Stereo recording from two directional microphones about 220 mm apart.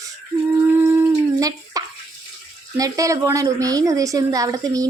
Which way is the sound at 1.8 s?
15° right (ahead or behind).